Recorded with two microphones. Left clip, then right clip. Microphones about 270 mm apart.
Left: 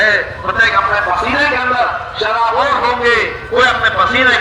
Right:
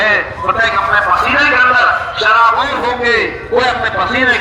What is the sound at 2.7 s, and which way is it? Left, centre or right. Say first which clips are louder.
A man's voice: left 1 dB; left.